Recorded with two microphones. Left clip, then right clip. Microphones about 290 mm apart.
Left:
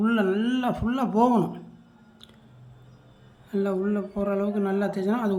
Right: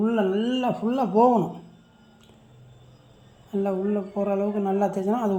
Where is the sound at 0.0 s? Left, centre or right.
Centre.